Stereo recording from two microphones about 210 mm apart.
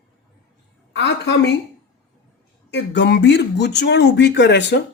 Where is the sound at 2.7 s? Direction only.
55° left (ahead or behind).